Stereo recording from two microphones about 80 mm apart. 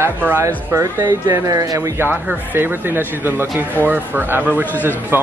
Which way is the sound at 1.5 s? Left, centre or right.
Right.